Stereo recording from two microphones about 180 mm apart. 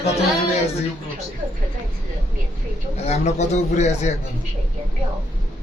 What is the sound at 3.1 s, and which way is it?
A man's voice, 40° left (ahead or behind).